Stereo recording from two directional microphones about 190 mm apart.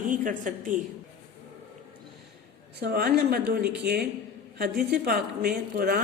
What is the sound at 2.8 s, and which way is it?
A woman's voice, 55° right (ahead or behind).